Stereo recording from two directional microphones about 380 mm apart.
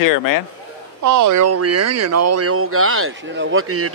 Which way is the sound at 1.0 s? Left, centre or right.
Right.